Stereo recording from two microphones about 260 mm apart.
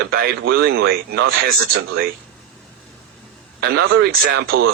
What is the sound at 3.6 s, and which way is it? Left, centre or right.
Speech, right.